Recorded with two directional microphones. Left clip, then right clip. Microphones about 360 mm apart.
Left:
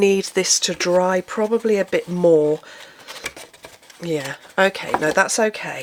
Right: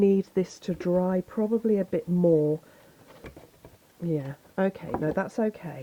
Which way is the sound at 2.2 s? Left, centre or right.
Centre.